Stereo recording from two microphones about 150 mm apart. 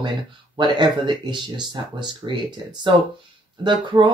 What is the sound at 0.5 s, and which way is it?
Speech, 30° right (ahead or behind).